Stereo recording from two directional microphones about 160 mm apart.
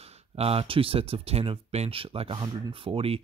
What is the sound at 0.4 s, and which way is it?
Speech, 40° right (ahead or behind).